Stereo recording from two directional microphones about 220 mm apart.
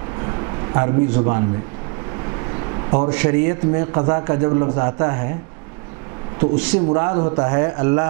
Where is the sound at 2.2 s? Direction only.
20° right (ahead or behind).